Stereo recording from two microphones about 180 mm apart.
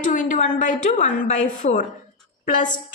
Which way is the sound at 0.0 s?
45° left (ahead or behind).